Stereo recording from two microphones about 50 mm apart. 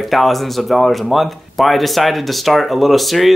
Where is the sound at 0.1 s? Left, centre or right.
Centre.